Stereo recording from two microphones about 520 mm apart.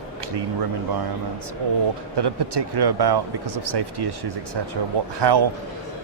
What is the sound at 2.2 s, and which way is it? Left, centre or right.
Speech, right.